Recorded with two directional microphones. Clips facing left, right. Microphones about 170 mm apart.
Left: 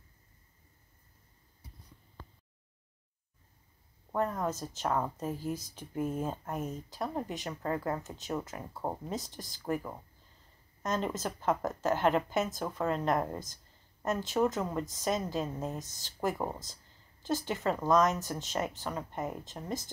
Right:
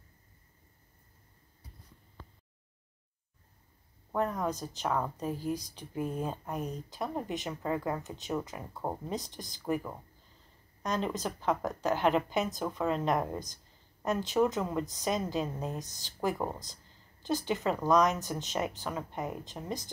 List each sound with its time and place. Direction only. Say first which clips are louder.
4.1 s speech: right 1 dB; centre (ahead or behind)
5.4 s speech: right 2 dB; 15° right (ahead or behind)
5.8 s speech: left 1 dB; 5° left (ahead or behind)